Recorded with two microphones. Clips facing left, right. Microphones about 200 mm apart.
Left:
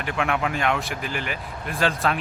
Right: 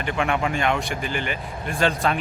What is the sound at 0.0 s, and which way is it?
Speech, centre (ahead or behind).